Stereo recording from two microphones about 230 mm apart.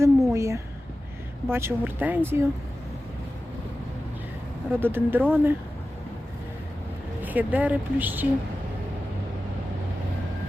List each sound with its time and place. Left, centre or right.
0.0 s a sound: centre
1.5 s speech: centre
4.8 s speech: centre
7.2 s speech: centre